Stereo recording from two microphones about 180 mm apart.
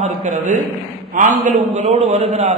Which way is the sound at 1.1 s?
45° right (ahead or behind).